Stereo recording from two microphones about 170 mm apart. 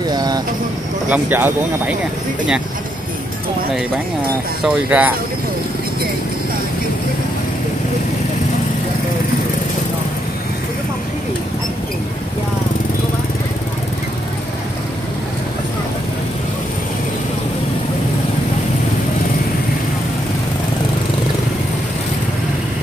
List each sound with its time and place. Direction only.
0.0 s vehicle: 25° right (ahead or behind)
1.1 s speech: 10° right (ahead or behind)
4.6 s speech: 10° right (ahead or behind)